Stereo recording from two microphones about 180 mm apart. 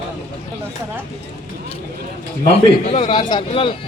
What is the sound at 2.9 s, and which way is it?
Speech, 30° left (ahead or behind).